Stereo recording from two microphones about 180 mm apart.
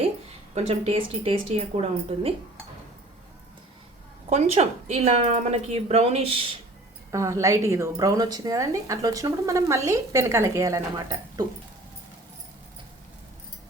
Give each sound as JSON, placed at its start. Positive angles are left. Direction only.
{"t": 0.5, "sound": "a woman's voice", "side_deg": -35}
{"t": 4.3, "sound": "a woman's voice", "side_deg": -35}
{"t": 7.1, "sound": "a woman's voice", "side_deg": -15}